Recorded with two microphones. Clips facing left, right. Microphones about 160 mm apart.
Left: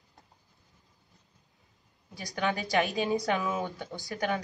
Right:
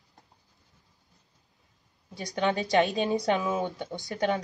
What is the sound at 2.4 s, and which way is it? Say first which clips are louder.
Speech: right 4 dB; 25° right (ahead or behind).